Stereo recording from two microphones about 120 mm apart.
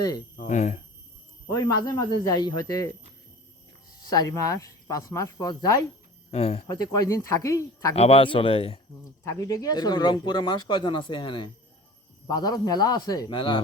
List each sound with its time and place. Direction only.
0.4 s speech: 90° left
1.5 s speech: 30° left (ahead or behind)
4.0 s speech: 35° left (ahead or behind)
6.3 s speech: 60° left (ahead or behind)
6.7 s speech: 35° left (ahead or behind)
7.9 s a man's voice: 55° left (ahead or behind)
9.2 s speech: 25° left (ahead or behind)
13.3 s speech: 40° left (ahead or behind)